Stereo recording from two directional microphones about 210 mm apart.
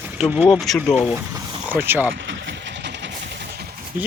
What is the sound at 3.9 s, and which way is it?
Speech, 40° right (ahead or behind).